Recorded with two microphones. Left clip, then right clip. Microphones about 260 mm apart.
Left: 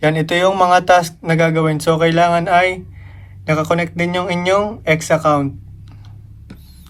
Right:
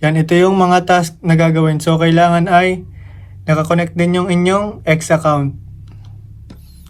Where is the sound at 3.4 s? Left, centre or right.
Centre.